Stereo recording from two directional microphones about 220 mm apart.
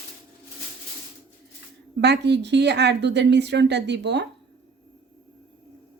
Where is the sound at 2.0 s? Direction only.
50° right (ahead or behind).